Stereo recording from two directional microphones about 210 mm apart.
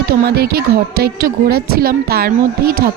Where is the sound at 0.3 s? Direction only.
50° right (ahead or behind).